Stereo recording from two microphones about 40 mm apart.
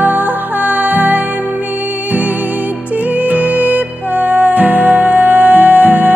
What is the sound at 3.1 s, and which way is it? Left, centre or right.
Music, right.